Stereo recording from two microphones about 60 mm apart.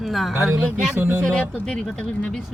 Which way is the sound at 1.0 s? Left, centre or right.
Right.